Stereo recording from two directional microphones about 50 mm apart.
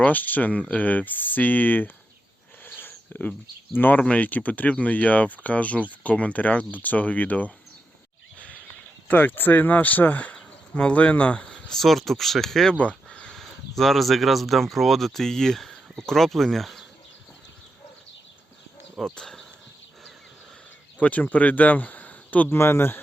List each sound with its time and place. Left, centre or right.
0.0 s speech: left
2.6 s a sound: left
3.8 s speech: left
4.0 s speech: left
9.0 s speech: left
10.3 s a sound: left
11.7 s speech: centre
12.7 s a sound: left
13.3 s speech: centre
19.1 s speech: centre
21.0 s speech: left
22.4 s speech: left